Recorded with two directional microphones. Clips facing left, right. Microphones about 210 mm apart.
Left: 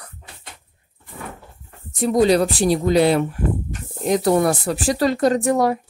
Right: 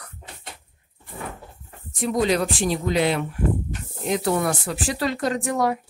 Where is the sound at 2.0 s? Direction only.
35° left (ahead or behind).